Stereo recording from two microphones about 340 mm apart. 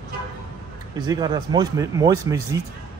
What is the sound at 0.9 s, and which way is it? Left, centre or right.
Speech, centre.